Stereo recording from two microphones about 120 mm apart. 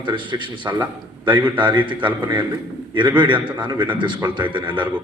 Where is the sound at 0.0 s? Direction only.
40° right (ahead or behind).